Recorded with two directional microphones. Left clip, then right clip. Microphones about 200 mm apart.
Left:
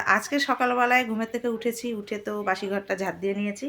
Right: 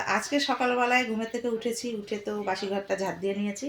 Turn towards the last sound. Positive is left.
turn(degrees=5)  # may be behind; listen again after turning